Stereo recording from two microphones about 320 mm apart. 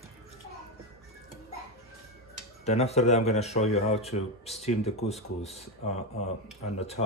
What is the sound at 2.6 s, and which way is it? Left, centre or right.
Speech, centre.